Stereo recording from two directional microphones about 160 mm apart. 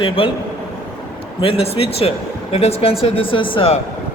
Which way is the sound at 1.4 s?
35° left (ahead or behind).